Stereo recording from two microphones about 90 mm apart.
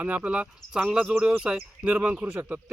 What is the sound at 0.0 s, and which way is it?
Speech, 15° right (ahead or behind).